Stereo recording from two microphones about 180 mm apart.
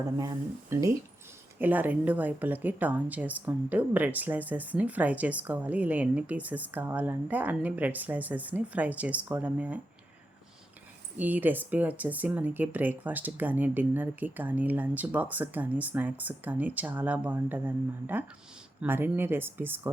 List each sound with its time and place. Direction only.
0.2 s a woman's voice: 20° right (ahead or behind)
11.2 s a woman's voice: 10° right (ahead or behind)